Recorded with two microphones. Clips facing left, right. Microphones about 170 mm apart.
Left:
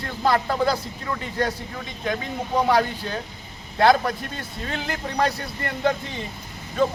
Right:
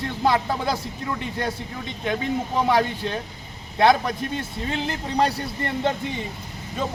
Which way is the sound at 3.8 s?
20° right (ahead or behind).